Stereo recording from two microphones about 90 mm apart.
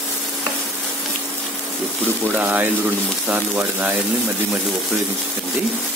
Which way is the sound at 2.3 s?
15° right (ahead or behind).